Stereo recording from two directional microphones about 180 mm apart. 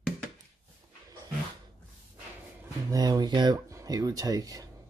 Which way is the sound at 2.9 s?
20° right (ahead or behind).